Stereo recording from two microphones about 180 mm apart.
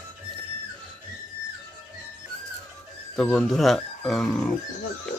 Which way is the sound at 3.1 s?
5° left (ahead or behind).